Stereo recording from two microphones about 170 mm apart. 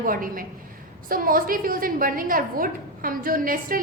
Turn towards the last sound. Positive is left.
turn(degrees=-55)  # may be behind; listen again after turning